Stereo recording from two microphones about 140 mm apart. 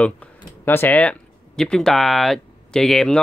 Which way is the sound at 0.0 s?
10° left (ahead or behind).